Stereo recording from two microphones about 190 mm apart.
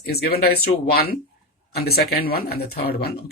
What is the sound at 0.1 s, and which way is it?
Speech, 55° left (ahead or behind).